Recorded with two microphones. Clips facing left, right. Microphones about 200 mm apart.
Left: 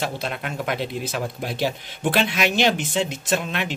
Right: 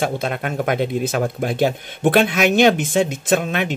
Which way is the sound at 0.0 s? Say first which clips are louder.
Right 6 dB; 50° right (ahead or behind).